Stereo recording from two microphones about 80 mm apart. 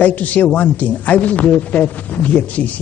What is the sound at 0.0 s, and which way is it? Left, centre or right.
Speech, centre.